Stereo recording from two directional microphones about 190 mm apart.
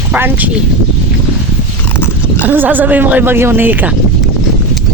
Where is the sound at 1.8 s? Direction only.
10° left (ahead or behind).